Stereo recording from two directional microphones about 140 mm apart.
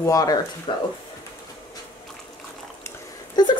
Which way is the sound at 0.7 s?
35° left (ahead or behind).